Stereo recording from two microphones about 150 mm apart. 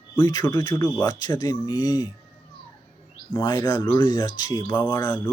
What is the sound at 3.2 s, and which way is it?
Speech, 30° left (ahead or behind).